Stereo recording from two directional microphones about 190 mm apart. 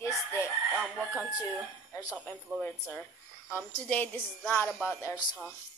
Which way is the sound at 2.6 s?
10° left (ahead or behind).